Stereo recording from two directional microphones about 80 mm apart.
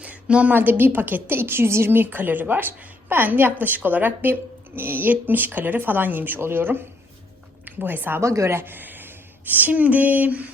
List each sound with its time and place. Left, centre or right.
0.0 s a woman's voice: centre
8.2 s a woman's voice: right